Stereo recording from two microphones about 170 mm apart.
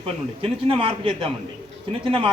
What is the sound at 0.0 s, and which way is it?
A man's voice, 35° right (ahead or behind).